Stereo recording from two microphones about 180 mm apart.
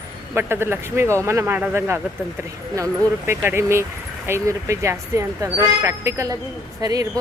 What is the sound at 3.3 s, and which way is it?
Speech, 15° right (ahead or behind).